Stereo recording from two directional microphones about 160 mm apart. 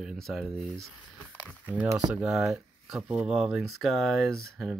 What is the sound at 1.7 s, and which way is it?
Speech, 10° right (ahead or behind).